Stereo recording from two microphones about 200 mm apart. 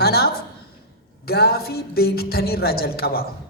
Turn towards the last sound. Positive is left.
turn(degrees=50)  # may be behind; listen again after turning